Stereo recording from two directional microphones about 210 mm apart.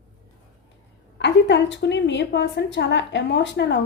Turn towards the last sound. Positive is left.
turn(degrees=55)  # may be behind; listen again after turning